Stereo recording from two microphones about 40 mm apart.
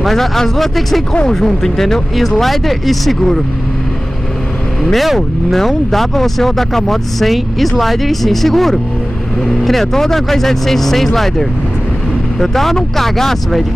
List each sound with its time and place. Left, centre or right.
0.0 s speech: centre
4.9 s speech: centre